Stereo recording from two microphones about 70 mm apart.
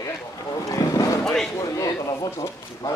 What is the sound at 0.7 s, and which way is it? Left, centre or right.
Boat, left.